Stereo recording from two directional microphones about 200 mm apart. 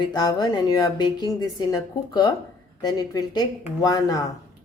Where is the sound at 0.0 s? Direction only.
20° left (ahead or behind).